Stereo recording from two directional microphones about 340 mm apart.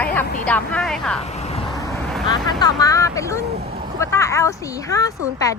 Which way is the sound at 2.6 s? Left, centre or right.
Centre.